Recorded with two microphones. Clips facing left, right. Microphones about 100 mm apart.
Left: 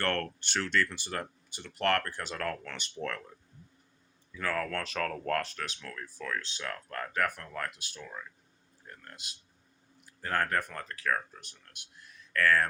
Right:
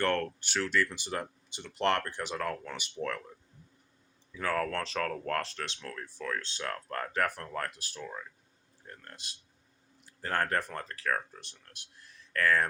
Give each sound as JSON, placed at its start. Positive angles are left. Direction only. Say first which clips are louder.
{"t": 0.0, "sound": "speech", "louder": "right 2 dB", "side_deg": -10}
{"t": 4.3, "sound": "speech", "louder": "right 2 dB", "side_deg": -20}
{"t": 10.2, "sound": "speech", "louder": "even", "side_deg": -30}